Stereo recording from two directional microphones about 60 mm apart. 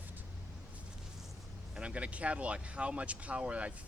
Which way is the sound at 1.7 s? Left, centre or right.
Centre.